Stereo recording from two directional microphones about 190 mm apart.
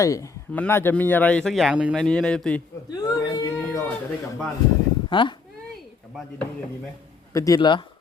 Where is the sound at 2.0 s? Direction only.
5° left (ahead or behind).